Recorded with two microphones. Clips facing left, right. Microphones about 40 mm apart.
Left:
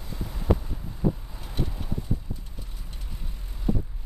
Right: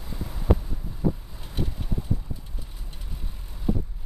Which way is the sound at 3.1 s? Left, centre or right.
Centre.